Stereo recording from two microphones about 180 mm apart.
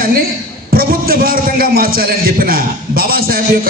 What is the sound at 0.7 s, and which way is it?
A man's voice, 55° right (ahead or behind).